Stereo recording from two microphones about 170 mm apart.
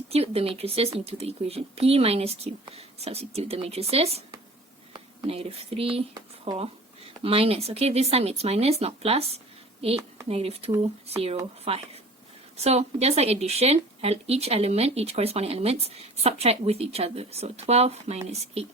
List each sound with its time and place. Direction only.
0.1 s speech: 35° right (ahead or behind)
12.6 s speech: 40° right (ahead or behind)